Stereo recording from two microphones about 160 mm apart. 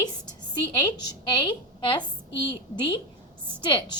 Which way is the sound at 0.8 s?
30° left (ahead or behind).